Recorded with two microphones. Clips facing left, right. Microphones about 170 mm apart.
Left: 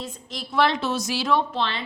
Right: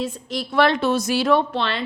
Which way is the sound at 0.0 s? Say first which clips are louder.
Right 8 dB; 65° right (ahead or behind).